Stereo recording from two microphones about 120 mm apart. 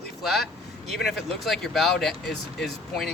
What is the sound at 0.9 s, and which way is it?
Speech, centre (ahead or behind).